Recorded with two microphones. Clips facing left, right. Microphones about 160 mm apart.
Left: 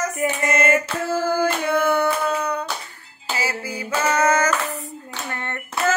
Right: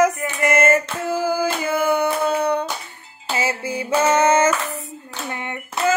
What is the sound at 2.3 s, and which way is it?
Hands, 30° right (ahead or behind).